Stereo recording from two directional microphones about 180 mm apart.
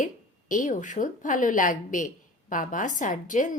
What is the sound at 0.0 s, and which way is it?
A woman's voice, 45° left (ahead or behind).